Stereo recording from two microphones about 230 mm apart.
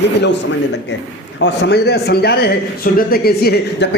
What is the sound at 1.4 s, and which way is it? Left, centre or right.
A man's voice, left.